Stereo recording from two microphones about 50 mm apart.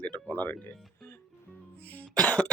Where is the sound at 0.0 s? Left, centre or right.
Left.